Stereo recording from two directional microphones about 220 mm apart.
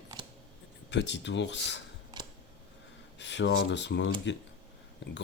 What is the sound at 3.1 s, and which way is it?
Speech, 55° left (ahead or behind).